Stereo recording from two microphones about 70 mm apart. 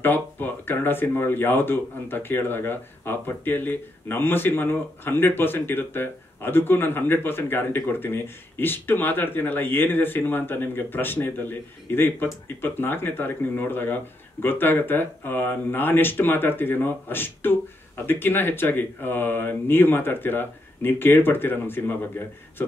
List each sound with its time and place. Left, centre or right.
0.0 s speech: left